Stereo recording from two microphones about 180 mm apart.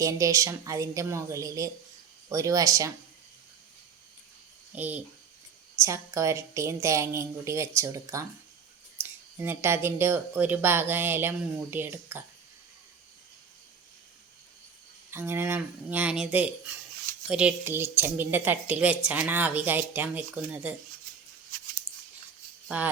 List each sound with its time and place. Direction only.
0.0 s a woman's voice: 15° right (ahead or behind)
4.7 s a child's voice: 10° right (ahead or behind)
15.1 s a woman's voice: 10° right (ahead or behind)
22.7 s a woman's voice: 10° right (ahead or behind)